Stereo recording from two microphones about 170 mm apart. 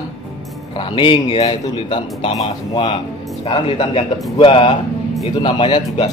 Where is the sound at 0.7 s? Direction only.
30° left (ahead or behind).